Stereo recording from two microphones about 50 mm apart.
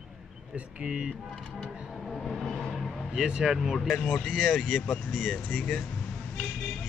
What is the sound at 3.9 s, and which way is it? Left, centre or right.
Speech, left.